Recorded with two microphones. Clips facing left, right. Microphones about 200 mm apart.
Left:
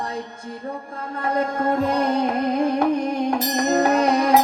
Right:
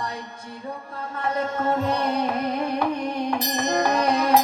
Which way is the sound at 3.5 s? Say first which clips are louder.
Left 4 dB; 45° left (ahead or behind).